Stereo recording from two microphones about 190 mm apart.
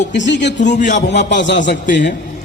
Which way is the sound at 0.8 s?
40° left (ahead or behind).